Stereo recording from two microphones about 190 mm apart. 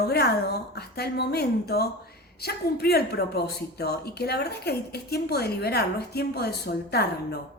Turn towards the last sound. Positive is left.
turn(degrees=55)  # may be behind; listen again after turning